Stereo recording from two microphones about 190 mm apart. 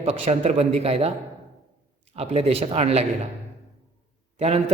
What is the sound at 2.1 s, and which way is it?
Speech, 35° right (ahead or behind).